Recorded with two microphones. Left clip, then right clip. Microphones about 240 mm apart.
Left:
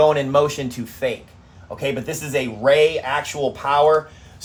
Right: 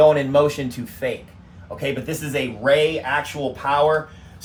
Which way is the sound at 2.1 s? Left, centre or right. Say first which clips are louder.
Left 1 dB; left.